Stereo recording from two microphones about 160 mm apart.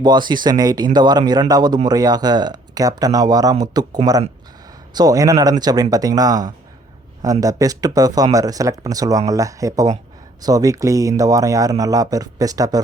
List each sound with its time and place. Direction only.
0.0 s speech: 25° right (ahead or behind)